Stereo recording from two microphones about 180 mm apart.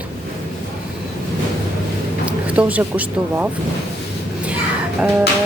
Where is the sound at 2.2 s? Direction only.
5° right (ahead or behind).